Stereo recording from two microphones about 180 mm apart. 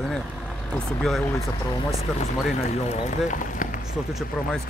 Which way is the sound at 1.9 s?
35° left (ahead or behind).